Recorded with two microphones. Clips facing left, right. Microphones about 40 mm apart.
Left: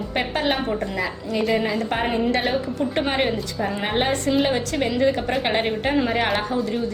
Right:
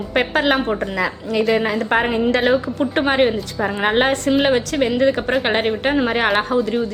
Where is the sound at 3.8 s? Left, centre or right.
Right.